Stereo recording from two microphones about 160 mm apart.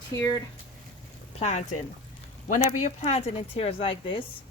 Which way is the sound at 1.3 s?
45° left (ahead or behind).